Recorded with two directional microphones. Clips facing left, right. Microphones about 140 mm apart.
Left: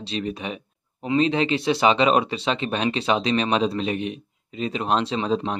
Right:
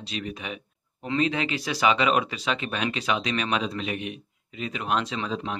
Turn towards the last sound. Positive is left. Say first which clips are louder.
# left 7 dB
turn(degrees=30)  # may be behind; listen again after turning